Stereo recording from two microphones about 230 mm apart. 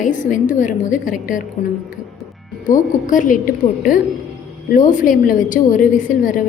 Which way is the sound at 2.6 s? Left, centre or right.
Left.